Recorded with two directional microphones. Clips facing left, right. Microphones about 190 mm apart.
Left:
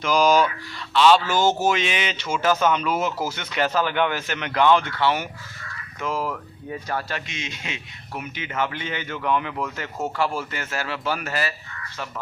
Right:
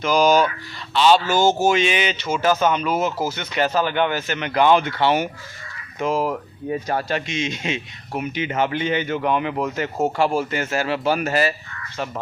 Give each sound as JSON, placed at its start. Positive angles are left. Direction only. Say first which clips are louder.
{"t": 0.0, "sound": "speech", "louder": "right 2 dB", "side_deg": -5}